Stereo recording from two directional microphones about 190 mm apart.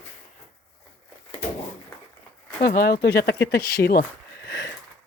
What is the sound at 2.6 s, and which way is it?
Speech, 55° left (ahead or behind).